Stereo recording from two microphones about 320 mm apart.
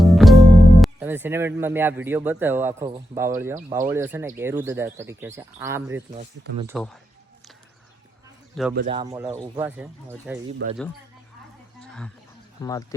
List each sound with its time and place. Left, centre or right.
0.0 s speech: centre
8.6 s speech: centre
8.9 s speech: centre
10.6 s speech: right
11.8 s a sound: centre
12.6 s speech: centre